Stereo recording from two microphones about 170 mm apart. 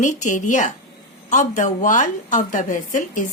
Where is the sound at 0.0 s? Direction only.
45° left (ahead or behind).